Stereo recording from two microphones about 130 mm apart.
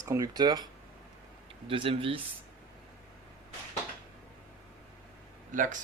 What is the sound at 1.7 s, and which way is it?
Speech, 45° right (ahead or behind).